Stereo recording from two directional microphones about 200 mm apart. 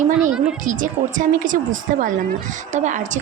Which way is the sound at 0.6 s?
40° right (ahead or behind).